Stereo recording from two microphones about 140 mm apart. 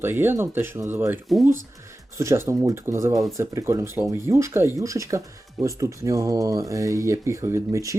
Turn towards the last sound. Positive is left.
turn(degrees=-20)  # may be behind; listen again after turning